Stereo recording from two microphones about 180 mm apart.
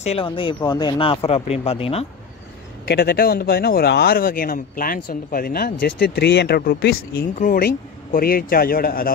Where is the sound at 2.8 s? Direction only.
60° left (ahead or behind).